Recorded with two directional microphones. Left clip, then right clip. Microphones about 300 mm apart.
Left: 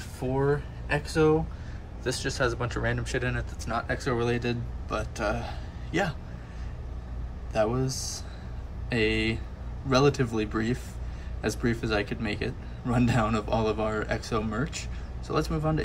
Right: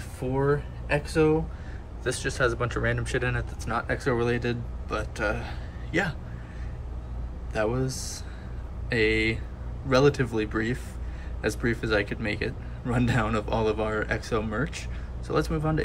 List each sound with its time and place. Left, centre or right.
0.2 s speech: centre
7.5 s speech: centre